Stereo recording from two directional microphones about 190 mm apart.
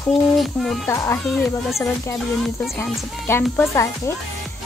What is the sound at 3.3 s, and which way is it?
Speech, 15° left (ahead or behind).